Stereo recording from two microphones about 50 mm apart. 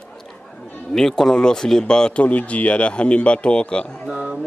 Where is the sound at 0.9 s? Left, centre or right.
Centre.